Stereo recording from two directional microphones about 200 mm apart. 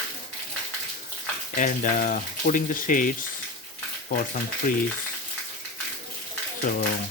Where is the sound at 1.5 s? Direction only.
40° left (ahead or behind).